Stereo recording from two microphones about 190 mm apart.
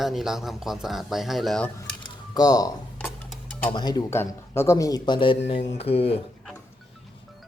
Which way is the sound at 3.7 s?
20° left (ahead or behind).